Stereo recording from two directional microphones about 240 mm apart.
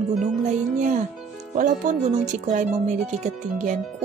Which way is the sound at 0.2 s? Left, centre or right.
Right.